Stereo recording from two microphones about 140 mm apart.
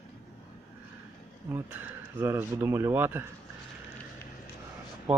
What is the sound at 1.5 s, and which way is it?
Speech, 15° right (ahead or behind).